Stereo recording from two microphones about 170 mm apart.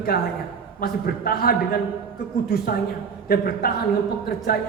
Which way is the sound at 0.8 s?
60° left (ahead or behind).